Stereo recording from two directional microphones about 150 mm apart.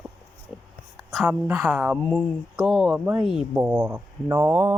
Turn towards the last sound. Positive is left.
turn(degrees=-15)  # may be behind; listen again after turning